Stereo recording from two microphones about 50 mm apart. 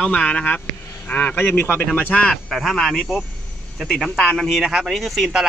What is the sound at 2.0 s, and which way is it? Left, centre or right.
Speech, left.